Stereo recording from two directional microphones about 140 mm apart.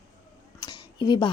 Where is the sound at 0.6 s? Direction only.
30° left (ahead or behind).